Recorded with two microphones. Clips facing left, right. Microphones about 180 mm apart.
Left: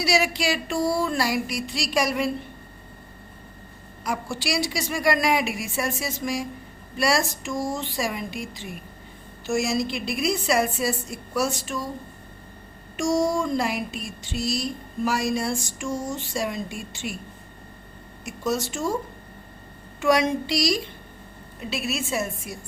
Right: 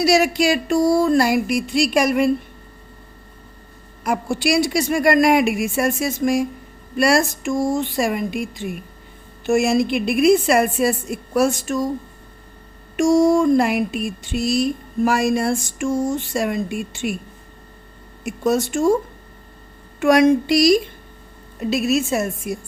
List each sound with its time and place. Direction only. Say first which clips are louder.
0.0 s a woman's voice: right 7 dB; 45° right (ahead or behind)
4.0 s a woman's voice: right 8 dB; 55° right (ahead or behind)
9.5 s a sound: right 7 dB; 55° right (ahead or behind)
11.3 s a woman's voice: right 8 dB; 50° right (ahead or behind)
13.0 s a sound: right 8 dB; 55° right (ahead or behind)
18.3 s a woman's voice: right 7 dB; 55° right (ahead or behind)
20.0 s a woman's voice: right 7 dB; 50° right (ahead or behind)
21.6 s a woman's voice: right 10 dB; 45° right (ahead or behind)